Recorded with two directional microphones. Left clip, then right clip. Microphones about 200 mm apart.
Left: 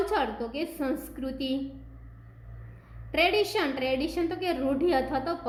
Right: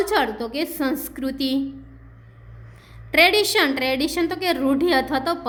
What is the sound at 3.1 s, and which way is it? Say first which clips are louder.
A woman's voice: right 8 dB; 35° right (ahead or behind).